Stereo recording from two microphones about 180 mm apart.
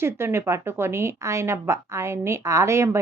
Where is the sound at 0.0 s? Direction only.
15° right (ahead or behind).